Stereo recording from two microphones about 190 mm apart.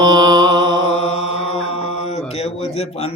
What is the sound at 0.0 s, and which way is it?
Mantra, 20° right (ahead or behind).